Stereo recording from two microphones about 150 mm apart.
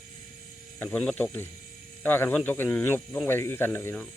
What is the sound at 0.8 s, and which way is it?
Speech, 10° left (ahead or behind).